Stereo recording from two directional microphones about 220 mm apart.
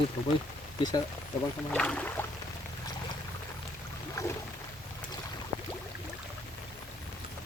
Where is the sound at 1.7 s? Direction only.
5° left (ahead or behind).